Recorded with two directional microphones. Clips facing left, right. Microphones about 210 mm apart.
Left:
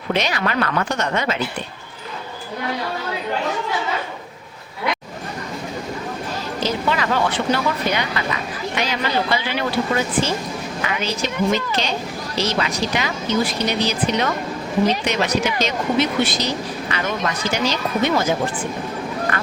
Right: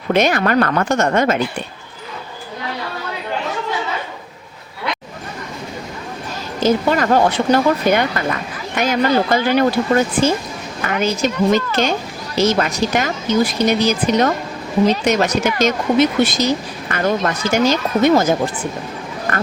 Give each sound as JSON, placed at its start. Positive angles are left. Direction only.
{"t": 0.1, "sound": "speech", "side_deg": -50}
{"t": 6.6, "sound": "speech", "side_deg": -50}